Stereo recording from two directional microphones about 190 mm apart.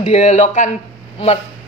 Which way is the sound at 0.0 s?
35° left (ahead or behind).